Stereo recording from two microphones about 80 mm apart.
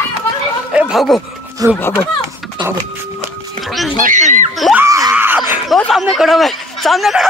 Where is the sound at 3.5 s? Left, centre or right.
Centre.